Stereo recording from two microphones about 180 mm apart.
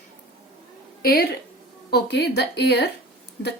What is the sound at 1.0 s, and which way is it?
A woman's voice, 55° left (ahead or behind).